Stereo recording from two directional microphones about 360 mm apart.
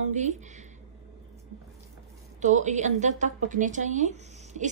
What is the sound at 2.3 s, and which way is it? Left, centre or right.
A woman's voice, centre.